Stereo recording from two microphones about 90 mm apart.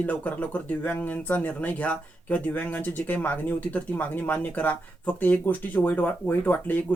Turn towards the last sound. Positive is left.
turn(degrees=20)  # may be behind; listen again after turning